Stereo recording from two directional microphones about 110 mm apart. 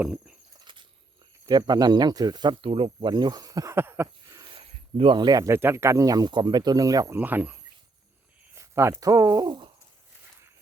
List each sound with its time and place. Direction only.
0.0 s speech: 10° right (ahead or behind)
0.6 s a sound: 50° right (ahead or behind)
1.5 s speech: 40° right (ahead or behind); by 4.4 s 25° right (ahead or behind)
4.4 s snake: 55° right (ahead or behind); by 5.5 s 35° right (ahead or behind)
5.5 s speech: 25° right (ahead or behind)
7.2 s speech: 15° right (ahead or behind); by 9.6 s 40° right (ahead or behind)